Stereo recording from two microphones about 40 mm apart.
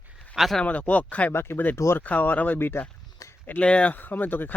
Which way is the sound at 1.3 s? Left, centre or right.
Left.